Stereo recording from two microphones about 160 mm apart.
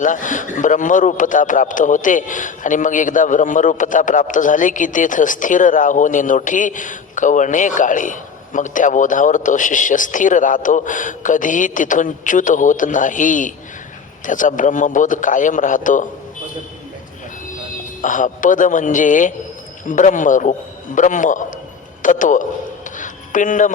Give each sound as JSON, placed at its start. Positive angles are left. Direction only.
{"t": 0.0, "sound": "a man's voice", "side_deg": 55}
{"t": 18.0, "sound": "a man's voice", "side_deg": 55}
{"t": 23.0, "sound": "a sound", "side_deg": 55}